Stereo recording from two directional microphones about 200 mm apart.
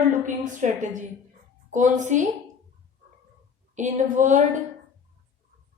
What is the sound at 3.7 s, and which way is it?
Speech, 40° right (ahead or behind).